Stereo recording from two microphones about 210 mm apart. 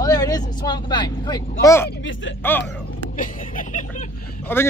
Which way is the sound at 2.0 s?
65° left (ahead or behind).